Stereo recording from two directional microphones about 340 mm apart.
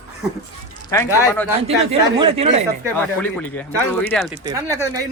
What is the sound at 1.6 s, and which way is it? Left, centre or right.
Speech, centre.